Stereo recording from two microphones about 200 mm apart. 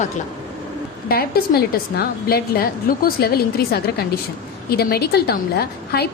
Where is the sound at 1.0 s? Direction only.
50° left (ahead or behind).